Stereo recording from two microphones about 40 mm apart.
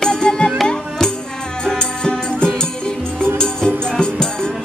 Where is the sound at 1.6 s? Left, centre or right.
Centre.